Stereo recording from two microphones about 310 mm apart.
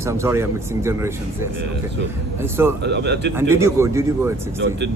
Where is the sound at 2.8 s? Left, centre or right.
Right.